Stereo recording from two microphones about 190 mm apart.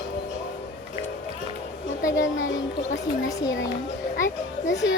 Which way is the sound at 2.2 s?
80° left.